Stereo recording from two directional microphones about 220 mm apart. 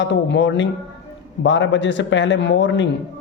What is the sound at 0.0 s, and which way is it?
A man's voice, 55° left (ahead or behind).